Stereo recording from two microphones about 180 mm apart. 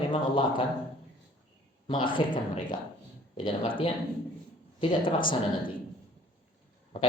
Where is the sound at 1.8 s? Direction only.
30° left (ahead or behind).